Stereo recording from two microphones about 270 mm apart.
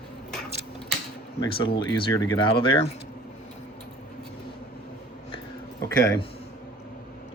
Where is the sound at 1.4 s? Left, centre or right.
Centre.